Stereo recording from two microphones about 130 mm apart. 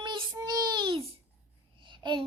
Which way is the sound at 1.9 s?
35° right (ahead or behind).